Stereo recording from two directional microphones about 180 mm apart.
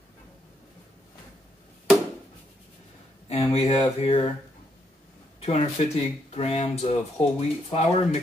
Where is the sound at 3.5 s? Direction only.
35° left (ahead or behind).